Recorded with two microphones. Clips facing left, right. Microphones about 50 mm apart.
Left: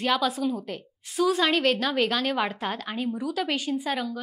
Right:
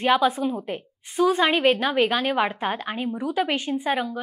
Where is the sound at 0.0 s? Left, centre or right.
Right.